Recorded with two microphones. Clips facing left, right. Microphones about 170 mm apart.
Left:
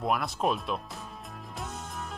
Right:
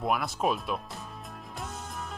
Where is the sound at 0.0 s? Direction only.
Centre (ahead or behind).